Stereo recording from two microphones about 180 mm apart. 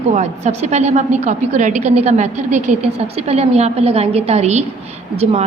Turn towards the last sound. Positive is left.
turn(degrees=-35)  # may be behind; listen again after turning